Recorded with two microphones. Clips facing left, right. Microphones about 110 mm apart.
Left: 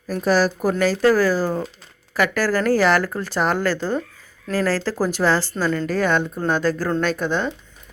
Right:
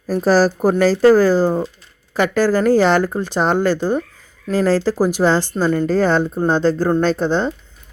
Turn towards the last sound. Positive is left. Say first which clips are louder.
# right 5 dB
turn(degrees=-30)  # may be behind; listen again after turning